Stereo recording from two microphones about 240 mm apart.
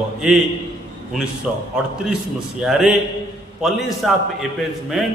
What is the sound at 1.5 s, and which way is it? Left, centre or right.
A man's voice, centre.